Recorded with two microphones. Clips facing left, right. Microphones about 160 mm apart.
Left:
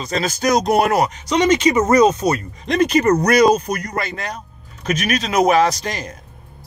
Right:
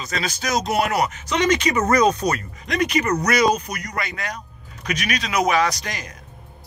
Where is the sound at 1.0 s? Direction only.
30° left (ahead or behind).